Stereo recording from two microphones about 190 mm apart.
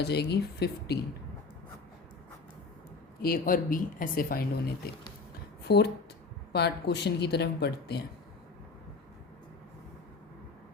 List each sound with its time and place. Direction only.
0.0 s speech: 60° left (ahead or behind)
3.2 s speech: 50° left (ahead or behind)